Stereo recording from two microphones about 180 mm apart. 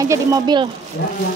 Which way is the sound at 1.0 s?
60° left (ahead or behind).